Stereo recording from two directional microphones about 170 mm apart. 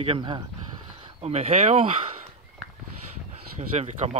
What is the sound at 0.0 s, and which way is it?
Speech, 30° right (ahead or behind).